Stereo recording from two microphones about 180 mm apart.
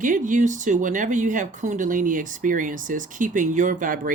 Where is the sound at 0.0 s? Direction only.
45° right (ahead or behind).